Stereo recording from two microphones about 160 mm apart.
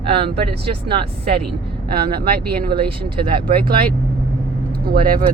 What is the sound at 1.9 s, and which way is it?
Speech, 70° right (ahead or behind).